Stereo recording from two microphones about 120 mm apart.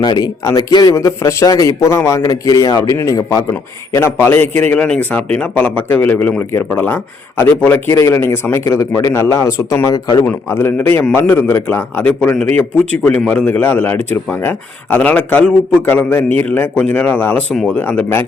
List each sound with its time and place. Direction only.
0.0 s a man's voice: 35° left (ahead or behind); by 17.4 s 15° left (ahead or behind)
17.5 s a man's voice: 5° left (ahead or behind)